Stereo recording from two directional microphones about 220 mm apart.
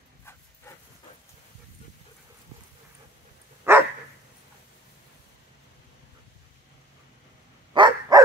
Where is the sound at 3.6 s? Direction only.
10° right (ahead or behind).